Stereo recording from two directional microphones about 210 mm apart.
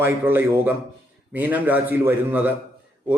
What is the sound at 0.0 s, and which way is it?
Speech, 10° right (ahead or behind).